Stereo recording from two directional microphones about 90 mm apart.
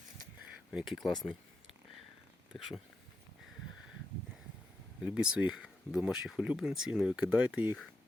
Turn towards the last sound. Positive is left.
turn(degrees=-15)  # may be behind; listen again after turning